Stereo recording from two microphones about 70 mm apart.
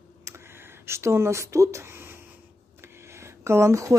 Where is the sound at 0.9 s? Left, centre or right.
Right.